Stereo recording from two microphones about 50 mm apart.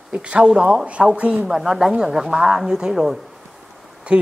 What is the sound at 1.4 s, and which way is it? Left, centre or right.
Speech, centre.